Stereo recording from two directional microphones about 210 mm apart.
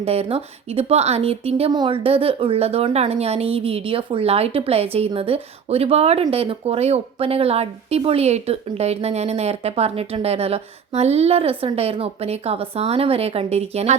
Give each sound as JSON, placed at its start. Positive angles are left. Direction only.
{"t": 0.0, "sound": "a woman's voice", "side_deg": -30}